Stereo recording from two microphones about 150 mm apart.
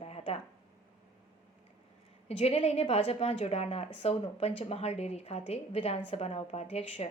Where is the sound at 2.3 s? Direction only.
45° left (ahead or behind).